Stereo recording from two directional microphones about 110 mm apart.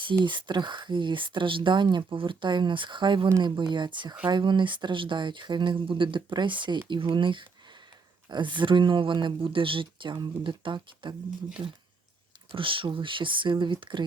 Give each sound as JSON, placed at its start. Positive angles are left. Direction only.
{"t": 0.3, "sound": "speech", "side_deg": -45}